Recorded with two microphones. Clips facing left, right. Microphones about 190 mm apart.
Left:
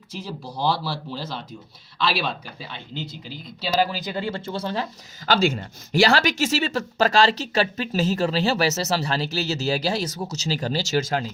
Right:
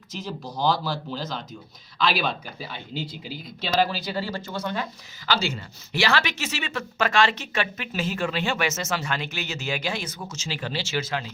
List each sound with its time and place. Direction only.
0.3 s speech: 5° left (ahead or behind)
3.7 s speech: 15° left (ahead or behind); by 4.9 s 30° left (ahead or behind)
5.2 s speech: 50° left (ahead or behind)